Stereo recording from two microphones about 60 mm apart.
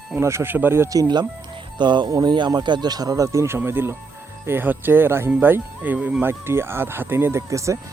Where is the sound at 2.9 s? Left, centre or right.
Right.